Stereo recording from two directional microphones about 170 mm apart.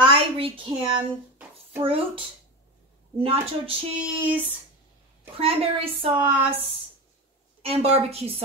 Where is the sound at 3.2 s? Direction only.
35° right (ahead or behind).